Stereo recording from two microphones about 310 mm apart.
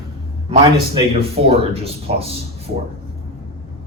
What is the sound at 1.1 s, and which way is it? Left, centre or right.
Speech, centre.